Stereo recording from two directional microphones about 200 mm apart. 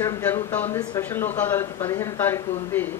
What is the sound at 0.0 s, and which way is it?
Speech, 10° left (ahead or behind).